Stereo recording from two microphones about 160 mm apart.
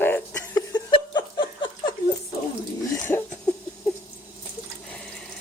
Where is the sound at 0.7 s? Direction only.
25° left (ahead or behind).